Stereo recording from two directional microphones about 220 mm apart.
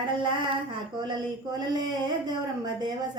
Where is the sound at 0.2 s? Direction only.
20° right (ahead or behind).